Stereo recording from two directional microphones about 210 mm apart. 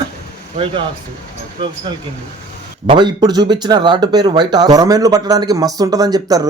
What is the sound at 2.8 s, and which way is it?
Speech, 20° right (ahead or behind).